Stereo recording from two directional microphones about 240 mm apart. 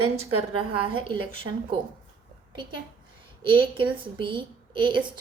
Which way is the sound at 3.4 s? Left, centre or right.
Right.